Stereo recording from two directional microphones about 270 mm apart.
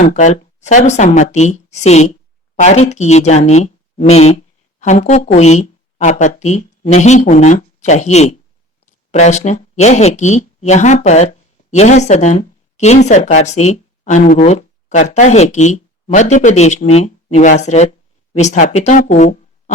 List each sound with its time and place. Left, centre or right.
0.0 s speech: left